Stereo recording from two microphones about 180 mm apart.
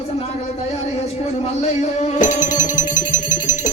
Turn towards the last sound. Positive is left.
turn(degrees=45)  # may be behind; listen again after turning